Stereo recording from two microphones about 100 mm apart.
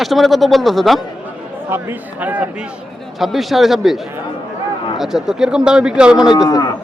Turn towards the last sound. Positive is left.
turn(degrees=35)  # may be behind; listen again after turning